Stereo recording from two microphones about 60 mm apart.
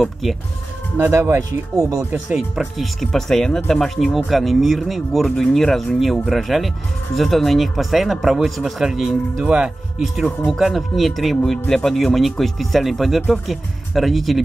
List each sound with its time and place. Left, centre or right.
0.0 s speech: centre
0.9 s speech: right
2.8 s speech: centre
9.4 s speech: centre
10.6 s speech: centre